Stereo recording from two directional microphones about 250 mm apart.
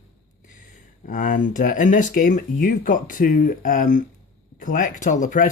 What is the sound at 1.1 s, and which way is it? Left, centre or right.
Speech, left.